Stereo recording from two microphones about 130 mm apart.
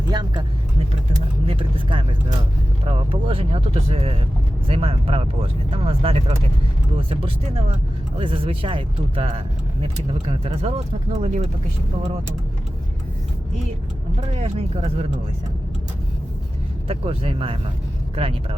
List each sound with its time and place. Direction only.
0.1 s speech: 35° right (ahead or behind)
1.5 s speech: 45° right (ahead or behind)
14.3 s speech: 60° right (ahead or behind)
16.9 s speech: 50° right (ahead or behind)